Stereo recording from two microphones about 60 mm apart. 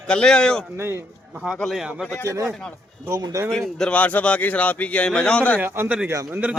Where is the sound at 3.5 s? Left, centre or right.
Centre.